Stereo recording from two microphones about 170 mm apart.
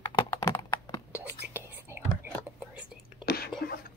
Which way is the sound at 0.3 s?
20° left (ahead or behind).